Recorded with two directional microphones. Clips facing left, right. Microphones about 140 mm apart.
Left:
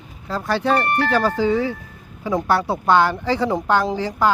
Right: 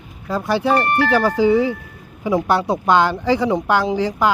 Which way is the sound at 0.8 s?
80° right.